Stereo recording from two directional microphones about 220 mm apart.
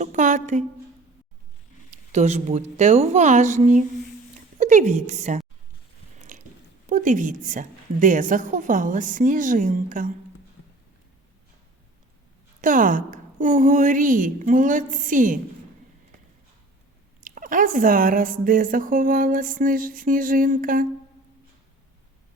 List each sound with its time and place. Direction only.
0.0 s a woman's voice: 35° right (ahead or behind)
2.1 s a woman's voice: 30° right (ahead or behind)
6.3 s biting: 35° right (ahead or behind)
6.8 s speech: 35° right (ahead or behind)
12.6 s speech: 35° right (ahead or behind)
17.2 s speech: 40° right (ahead or behind)